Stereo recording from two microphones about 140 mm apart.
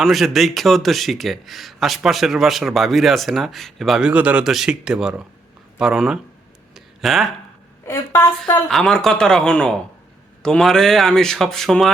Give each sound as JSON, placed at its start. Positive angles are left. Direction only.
{"t": 0.0, "sound": "a man's voice", "side_deg": 0}
{"t": 6.7, "sound": "a sound", "side_deg": 0}
{"t": 7.9, "sound": "a woman's voice", "side_deg": 20}
{"t": 8.7, "sound": "a man's voice", "side_deg": 5}